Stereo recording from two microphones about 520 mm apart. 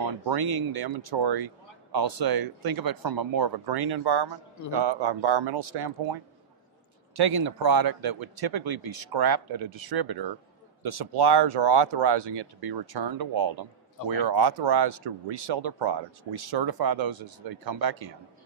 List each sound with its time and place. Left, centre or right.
0.3 s speech: right
7.2 s speech: right